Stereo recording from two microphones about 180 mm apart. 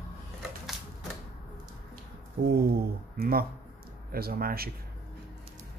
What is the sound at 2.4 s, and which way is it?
Speech, 60° right (ahead or behind).